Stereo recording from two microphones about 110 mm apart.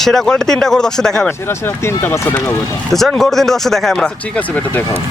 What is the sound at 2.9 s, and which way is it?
Speech, 5° left (ahead or behind).